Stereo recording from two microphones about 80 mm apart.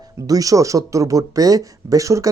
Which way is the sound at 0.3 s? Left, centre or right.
Right.